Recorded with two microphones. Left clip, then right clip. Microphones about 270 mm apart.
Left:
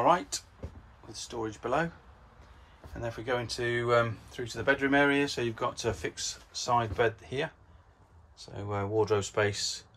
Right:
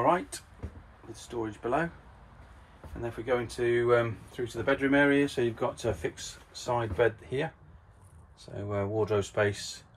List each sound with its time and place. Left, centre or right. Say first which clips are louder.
0.0 s speech: left 1 dB; centre
3.0 s speech: right 2 dB; centre